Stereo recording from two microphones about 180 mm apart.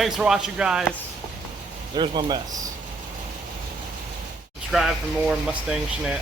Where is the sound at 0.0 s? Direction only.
5° right (ahead or behind).